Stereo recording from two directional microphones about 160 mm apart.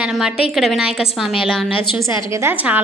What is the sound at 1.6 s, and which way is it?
Speech, 35° left (ahead or behind).